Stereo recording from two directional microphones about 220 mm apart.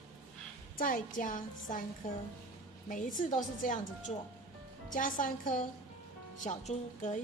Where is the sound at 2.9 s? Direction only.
35° left (ahead or behind).